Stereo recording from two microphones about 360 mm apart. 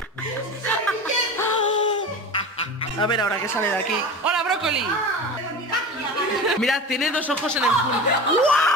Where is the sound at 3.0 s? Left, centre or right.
Centre.